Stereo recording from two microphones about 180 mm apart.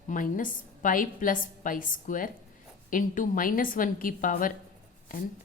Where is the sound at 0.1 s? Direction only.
50° left (ahead or behind).